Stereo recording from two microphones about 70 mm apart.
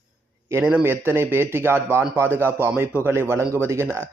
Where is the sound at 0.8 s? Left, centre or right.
Right.